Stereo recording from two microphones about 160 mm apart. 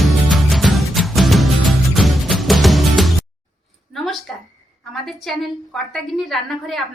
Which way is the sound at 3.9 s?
Centre (ahead or behind).